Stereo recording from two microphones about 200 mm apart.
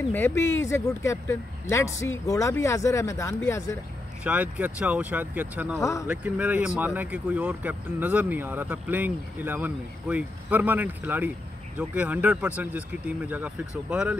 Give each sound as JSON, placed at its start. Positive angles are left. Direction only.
{"t": 0.1, "sound": "speech", "side_deg": 10}
{"t": 4.2, "sound": "speech", "side_deg": -5}
{"t": 5.8, "sound": "speech", "side_deg": 15}
{"t": 6.0, "sound": "speech", "side_deg": -5}